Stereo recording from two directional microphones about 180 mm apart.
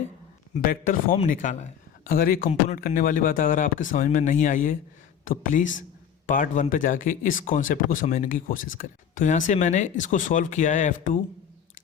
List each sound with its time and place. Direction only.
0.6 s speech: 50° left (ahead or behind)